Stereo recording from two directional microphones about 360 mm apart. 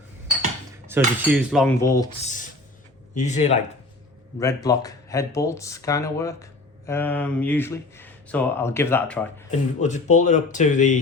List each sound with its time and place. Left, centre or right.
0.9 s cutlery: centre
3.2 s speech: centre
9.5 s speech: centre